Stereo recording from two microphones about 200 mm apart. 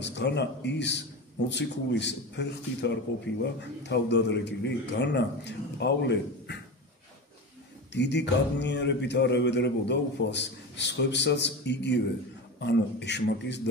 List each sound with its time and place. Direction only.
0.0 s speech: 60° left (ahead or behind)
7.9 s speech: 60° left (ahead or behind)